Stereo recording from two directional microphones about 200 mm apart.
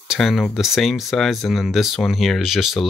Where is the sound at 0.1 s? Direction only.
Centre (ahead or behind).